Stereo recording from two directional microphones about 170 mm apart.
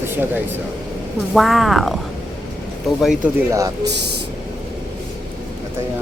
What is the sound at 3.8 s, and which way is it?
Speech, 80° right.